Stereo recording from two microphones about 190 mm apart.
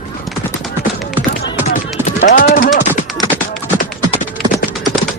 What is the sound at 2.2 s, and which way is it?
Speech, 45° left (ahead or behind).